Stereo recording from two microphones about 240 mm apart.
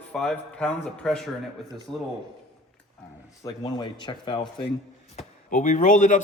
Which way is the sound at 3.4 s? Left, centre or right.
Centre.